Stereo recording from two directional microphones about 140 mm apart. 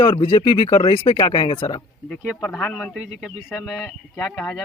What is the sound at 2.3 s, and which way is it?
Speech, 15° left (ahead or behind).